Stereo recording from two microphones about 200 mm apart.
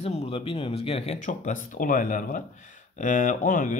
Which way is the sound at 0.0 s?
30° left (ahead or behind).